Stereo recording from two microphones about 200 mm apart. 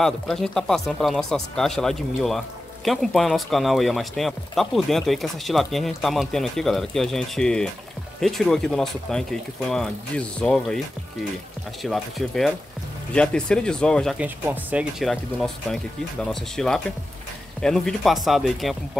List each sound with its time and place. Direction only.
0.0 s speech: centre (ahead or behind)
11.8 s speech: centre (ahead or behind)